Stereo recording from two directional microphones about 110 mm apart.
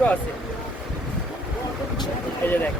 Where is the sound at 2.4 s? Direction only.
20° left (ahead or behind).